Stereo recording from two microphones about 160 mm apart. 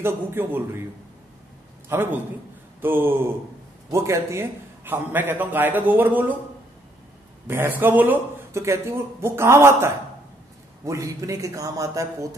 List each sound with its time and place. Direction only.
0.0 s a man's voice: 15° right (ahead or behind)
1.9 s a man's voice: 10° right (ahead or behind)
7.4 s a man's voice: 15° right (ahead or behind)